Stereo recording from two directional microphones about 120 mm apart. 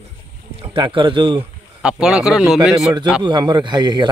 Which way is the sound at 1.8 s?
5° right (ahead or behind).